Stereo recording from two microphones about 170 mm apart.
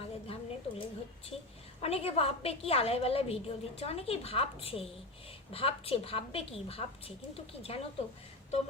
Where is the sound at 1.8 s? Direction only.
35° left (ahead or behind).